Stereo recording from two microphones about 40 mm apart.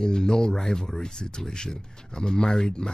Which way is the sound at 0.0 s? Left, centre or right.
Centre.